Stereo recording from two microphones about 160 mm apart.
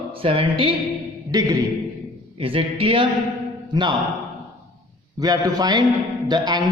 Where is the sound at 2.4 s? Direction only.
35° right (ahead or behind).